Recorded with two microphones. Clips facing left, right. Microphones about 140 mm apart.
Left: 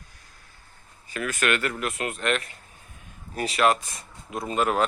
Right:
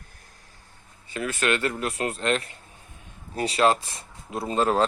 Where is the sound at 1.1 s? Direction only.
25° right (ahead or behind).